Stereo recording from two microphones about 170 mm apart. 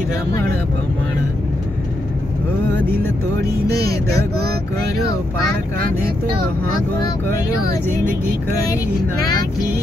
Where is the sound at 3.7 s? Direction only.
70° right (ahead or behind).